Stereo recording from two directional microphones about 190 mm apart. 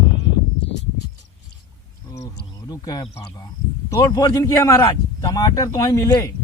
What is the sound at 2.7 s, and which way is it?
Speech, 20° left (ahead or behind).